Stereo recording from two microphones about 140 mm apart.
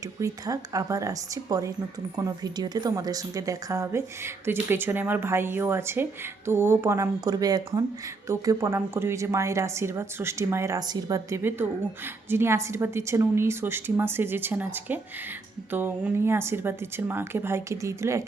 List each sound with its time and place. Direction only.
0.2 s a woman's voice: 25° right (ahead or behind)